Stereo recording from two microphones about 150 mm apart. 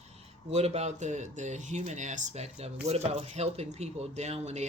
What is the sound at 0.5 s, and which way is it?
Speech, 45° right (ahead or behind).